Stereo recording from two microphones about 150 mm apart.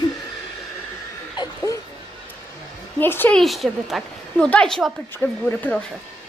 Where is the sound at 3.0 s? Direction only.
15° left (ahead or behind).